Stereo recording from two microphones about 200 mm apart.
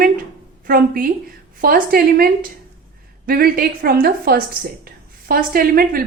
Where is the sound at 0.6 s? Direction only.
45° right (ahead or behind).